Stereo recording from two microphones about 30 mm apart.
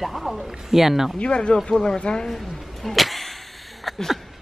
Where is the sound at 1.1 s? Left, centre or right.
Left.